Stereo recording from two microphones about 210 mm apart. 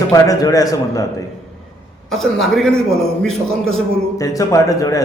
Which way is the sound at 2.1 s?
Centre (ahead or behind).